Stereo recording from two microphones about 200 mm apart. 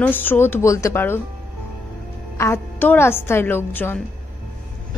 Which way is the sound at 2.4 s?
10° left (ahead or behind).